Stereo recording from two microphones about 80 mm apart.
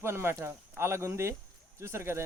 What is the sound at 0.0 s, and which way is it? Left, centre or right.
Speech, right.